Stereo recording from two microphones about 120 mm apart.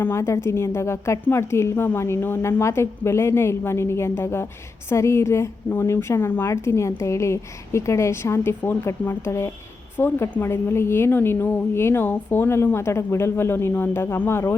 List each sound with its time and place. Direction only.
0.0 s a woman's voice: 20° left (ahead or behind)